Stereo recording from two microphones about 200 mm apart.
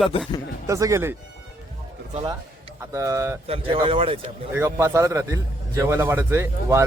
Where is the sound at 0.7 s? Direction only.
15° right (ahead or behind).